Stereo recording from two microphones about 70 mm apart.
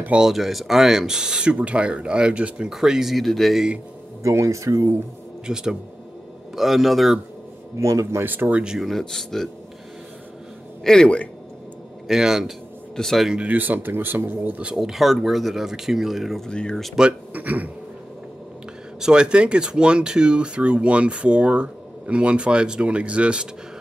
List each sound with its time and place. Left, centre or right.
0.2 s speech: centre
4.2 s speech: right
5.5 s speech: centre
7.8 s speech: right
8.2 s speech: right
8.6 s speech: centre
10.8 s a man's voice: centre
12.1 s speech: centre
12.9 s speech: centre
13.3 s speech: centre
14.8 s speech: centre
16.4 s speech: centre
17.3 s speech: right
18.9 s speech: centre